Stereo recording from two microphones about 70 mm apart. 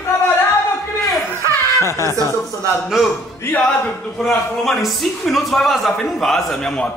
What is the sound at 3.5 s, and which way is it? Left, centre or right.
Speech, left.